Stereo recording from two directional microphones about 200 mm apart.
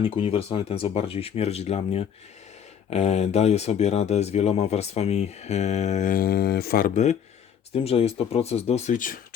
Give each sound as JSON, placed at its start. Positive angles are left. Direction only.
{"t": 0.0, "sound": "speech", "side_deg": 30}